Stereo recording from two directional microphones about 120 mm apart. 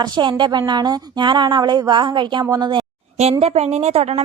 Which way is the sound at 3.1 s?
60° right (ahead or behind).